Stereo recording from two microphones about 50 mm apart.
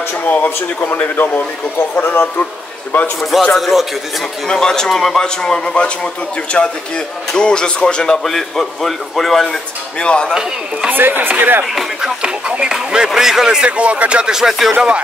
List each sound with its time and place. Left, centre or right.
0.3 s speech: left
3.2 s a man's voice: centre
4.5 s a man's voice: centre
8.2 s a man's voice: centre
9.9 s speech: left
10.9 s speech: right
12.2 s speech: centre
13.7 s speech: right
14.3 s a man's voice: centre